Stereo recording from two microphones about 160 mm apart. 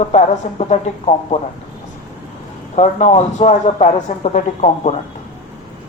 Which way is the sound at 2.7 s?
45° left (ahead or behind).